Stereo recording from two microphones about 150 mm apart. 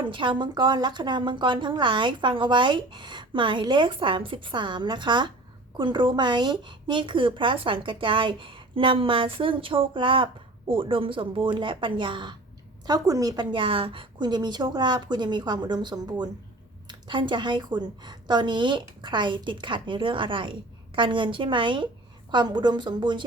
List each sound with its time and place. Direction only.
0.0 s a woman's voice: 35° right (ahead or behind)